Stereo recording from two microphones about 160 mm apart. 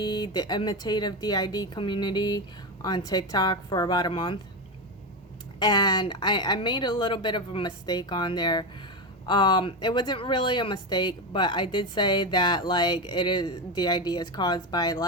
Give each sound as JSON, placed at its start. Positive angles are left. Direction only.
{"t": 0.0, "sound": "speech", "side_deg": 25}
{"t": 5.5, "sound": "speech", "side_deg": 25}